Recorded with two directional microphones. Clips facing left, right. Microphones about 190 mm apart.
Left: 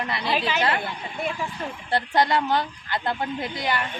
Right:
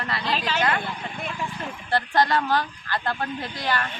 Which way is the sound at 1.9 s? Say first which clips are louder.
Even; 20° left (ahead or behind).